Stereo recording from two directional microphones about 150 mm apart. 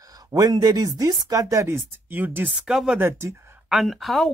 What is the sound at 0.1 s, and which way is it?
Speech, 25° right (ahead or behind).